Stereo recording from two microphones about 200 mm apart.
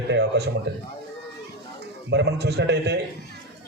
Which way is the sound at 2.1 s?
55° right (ahead or behind).